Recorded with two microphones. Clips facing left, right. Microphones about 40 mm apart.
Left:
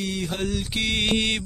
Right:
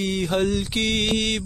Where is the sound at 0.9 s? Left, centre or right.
Centre.